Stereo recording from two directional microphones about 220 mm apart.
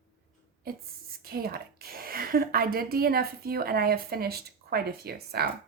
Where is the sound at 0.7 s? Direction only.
45° right (ahead or behind).